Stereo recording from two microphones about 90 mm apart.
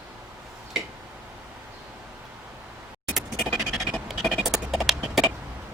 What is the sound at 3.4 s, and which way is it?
Scratch, centre (ahead or behind).